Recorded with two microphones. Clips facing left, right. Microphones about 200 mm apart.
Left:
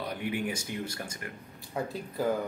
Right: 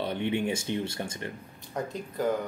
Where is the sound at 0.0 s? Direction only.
25° right (ahead or behind).